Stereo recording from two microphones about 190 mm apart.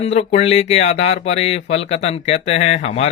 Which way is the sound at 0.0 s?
35° left (ahead or behind).